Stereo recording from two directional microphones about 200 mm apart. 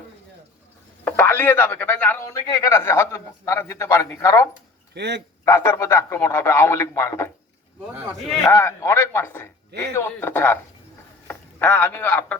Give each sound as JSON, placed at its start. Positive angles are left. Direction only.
{"t": 1.0, "sound": "speech", "side_deg": 10}
{"t": 4.9, "sound": "speech", "side_deg": -60}
{"t": 5.5, "sound": "speech", "side_deg": 15}
{"t": 8.4, "sound": "a man's voice", "side_deg": 15}